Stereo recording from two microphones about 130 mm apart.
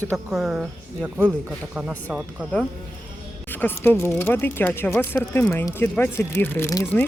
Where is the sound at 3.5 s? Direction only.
15° left (ahead or behind).